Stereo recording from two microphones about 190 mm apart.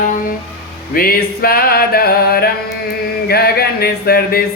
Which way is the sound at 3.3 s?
55° left (ahead or behind).